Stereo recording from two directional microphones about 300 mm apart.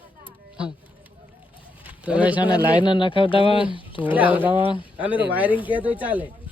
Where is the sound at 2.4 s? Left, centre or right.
Centre.